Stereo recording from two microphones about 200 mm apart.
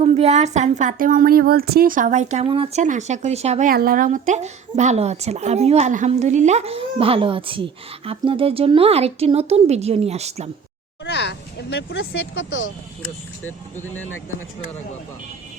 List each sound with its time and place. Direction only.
0.0 s speech: 35° right (ahead or behind)
2.8 s speech: 40° right (ahead or behind)
11.0 s speech: 60° left (ahead or behind)